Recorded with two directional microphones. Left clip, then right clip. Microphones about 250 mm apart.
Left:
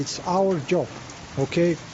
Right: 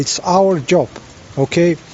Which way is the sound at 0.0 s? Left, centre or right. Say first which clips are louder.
Right 9 dB; right.